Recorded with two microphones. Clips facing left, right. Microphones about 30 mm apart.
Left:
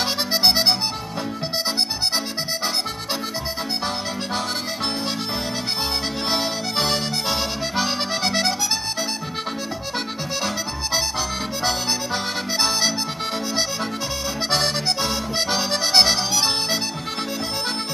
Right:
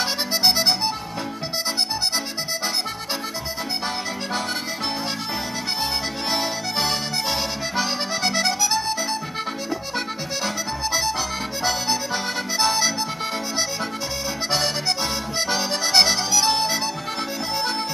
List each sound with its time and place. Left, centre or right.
0.0 s accordion: centre
6.3 s music: centre
11.1 s accordion: centre
14.5 s accordion: centre
15.8 s music: centre